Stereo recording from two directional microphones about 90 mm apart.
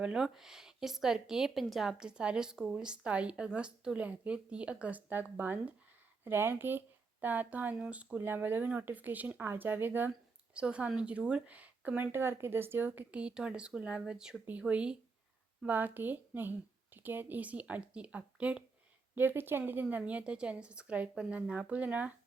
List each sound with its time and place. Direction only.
0.0 s speech: 5° right (ahead or behind)
12.1 s speech: 25° right (ahead or behind)